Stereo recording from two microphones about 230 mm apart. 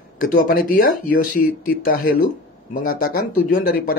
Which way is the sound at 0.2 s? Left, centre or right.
Left.